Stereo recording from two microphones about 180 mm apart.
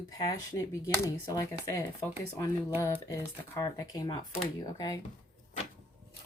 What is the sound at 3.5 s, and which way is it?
Speech, 20° left (ahead or behind).